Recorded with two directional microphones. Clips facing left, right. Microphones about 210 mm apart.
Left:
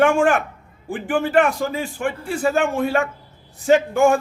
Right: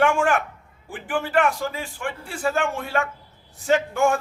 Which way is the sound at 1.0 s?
20° left (ahead or behind).